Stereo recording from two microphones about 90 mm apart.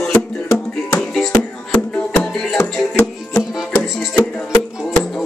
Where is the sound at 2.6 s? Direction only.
20° left (ahead or behind).